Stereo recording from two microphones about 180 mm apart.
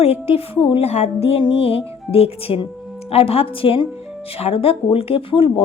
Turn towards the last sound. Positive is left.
turn(degrees=30)  # may be behind; listen again after turning